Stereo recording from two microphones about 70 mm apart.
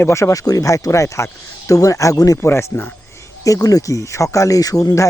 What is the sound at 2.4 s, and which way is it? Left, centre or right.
Speech, left.